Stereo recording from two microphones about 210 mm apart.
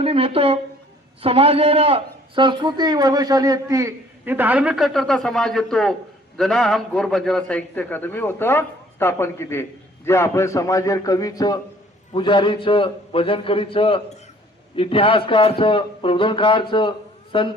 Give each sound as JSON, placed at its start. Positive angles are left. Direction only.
{"t": 0.0, "sound": "a man's voice", "side_deg": -25}